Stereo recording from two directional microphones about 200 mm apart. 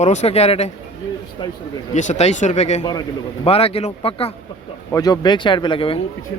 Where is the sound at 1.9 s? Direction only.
35° left (ahead or behind).